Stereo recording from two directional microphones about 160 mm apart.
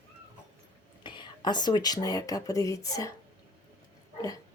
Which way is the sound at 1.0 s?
30° left (ahead or behind).